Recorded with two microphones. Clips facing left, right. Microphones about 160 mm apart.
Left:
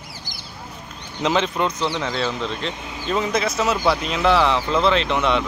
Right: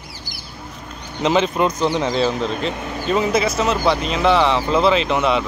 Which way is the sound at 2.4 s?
45° right (ahead or behind).